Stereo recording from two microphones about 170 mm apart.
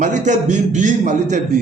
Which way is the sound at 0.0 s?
45° right (ahead or behind).